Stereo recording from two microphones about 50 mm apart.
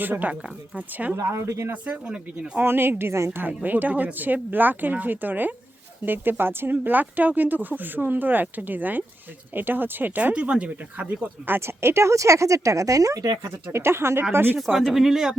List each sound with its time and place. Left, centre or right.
0.0 s speech: right
1.1 s speech: right
1.7 s speech: right
2.6 s speech: right
3.0 s speech: right
3.3 s speech: right
11.4 s speech: right
14.3 s speech: right
14.8 s speech: centre